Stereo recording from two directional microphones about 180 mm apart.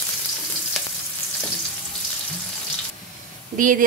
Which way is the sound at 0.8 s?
Centre (ahead or behind).